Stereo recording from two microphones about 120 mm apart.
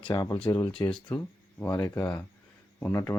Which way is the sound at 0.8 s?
10° left (ahead or behind).